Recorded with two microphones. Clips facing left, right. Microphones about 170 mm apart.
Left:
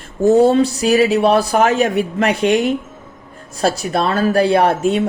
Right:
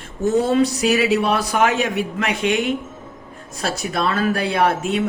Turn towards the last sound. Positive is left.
turn(degrees=35)  # may be behind; listen again after turning